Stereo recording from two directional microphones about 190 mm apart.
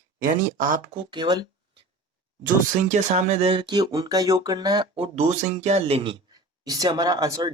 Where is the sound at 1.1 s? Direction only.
20° right (ahead or behind).